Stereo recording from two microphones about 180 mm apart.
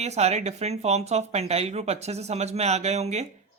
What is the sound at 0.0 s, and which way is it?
Speech, 40° right (ahead or behind).